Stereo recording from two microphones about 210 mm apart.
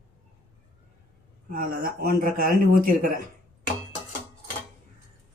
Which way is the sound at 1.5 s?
45° right (ahead or behind).